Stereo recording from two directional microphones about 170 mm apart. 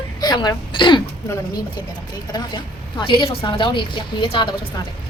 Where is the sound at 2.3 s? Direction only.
25° left (ahead or behind).